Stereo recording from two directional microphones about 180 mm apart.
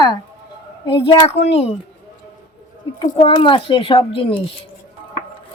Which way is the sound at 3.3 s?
30° left (ahead or behind).